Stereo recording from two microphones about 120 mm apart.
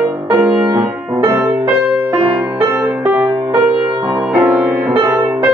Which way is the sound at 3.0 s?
5° right (ahead or behind).